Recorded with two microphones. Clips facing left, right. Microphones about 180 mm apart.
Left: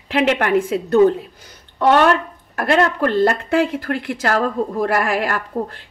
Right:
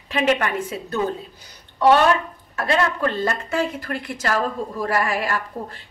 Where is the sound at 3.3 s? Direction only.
60° left (ahead or behind).